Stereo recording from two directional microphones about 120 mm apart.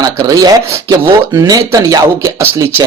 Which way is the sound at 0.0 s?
30° right (ahead or behind).